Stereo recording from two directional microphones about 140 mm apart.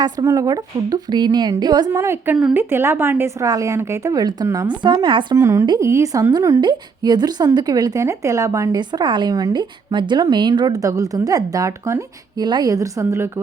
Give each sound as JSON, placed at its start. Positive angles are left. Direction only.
{"t": 0.0, "sound": "a woman's voice", "side_deg": -25}
{"t": 1.9, "sound": "a woman's voice", "side_deg": -15}